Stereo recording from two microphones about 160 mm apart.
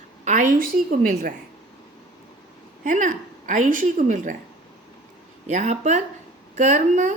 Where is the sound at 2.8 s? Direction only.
55° right (ahead or behind).